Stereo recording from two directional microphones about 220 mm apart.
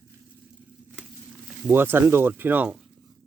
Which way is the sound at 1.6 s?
10° right (ahead or behind).